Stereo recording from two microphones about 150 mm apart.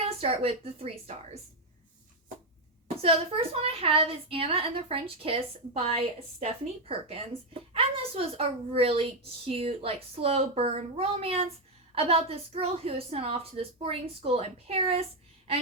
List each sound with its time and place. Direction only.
0.0 s a woman's voice: 40° right (ahead or behind)
3.0 s a woman's voice: 40° right (ahead or behind)